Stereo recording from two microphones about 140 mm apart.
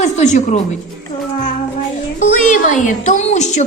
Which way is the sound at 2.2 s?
65° left (ahead or behind).